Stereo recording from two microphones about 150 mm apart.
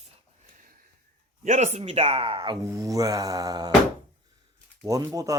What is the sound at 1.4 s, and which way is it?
Speech, 50° right (ahead or behind).